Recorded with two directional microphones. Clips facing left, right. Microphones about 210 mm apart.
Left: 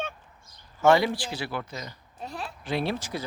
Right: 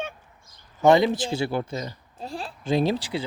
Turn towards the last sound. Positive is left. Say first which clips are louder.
# right 6 dB
turn(degrees=-35)  # may be behind; listen again after turning